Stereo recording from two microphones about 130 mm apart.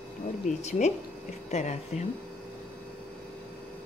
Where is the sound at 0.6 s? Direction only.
60° left (ahead or behind).